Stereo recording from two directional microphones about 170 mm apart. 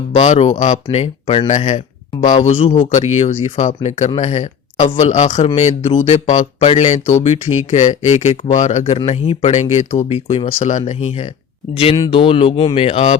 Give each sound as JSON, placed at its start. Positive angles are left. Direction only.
{"t": 0.1, "sound": "speech", "side_deg": 40}
{"t": 2.8, "sound": "speech", "side_deg": 45}